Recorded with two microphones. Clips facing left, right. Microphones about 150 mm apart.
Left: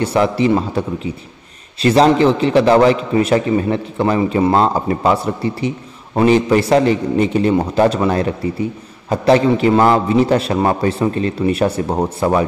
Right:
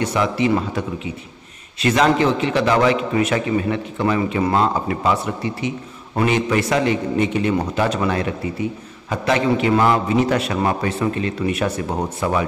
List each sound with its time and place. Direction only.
0.0 s a man's voice: 30° left (ahead or behind)